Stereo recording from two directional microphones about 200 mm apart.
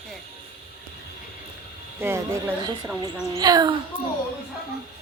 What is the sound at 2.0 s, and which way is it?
A woman's voice, 10° right (ahead or behind).